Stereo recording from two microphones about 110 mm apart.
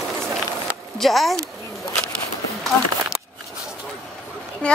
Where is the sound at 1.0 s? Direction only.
Centre (ahead or behind).